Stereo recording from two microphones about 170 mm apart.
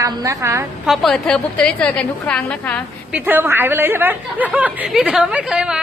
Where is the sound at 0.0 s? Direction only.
20° right (ahead or behind).